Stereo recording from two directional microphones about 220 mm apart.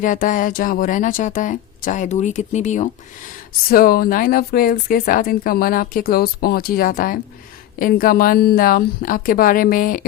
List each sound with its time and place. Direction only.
0.0 s speech: 35° left (ahead or behind)